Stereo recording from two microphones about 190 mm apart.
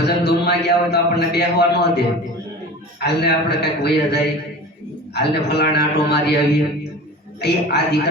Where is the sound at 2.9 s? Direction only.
60° left (ahead or behind).